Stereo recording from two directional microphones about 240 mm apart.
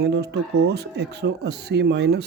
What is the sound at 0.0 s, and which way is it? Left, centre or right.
Speech, right.